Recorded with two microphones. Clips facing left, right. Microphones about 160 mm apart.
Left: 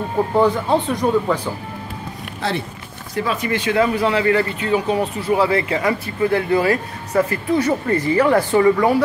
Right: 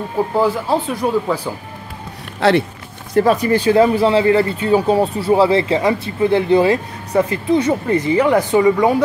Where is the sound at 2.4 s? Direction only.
75° right (ahead or behind).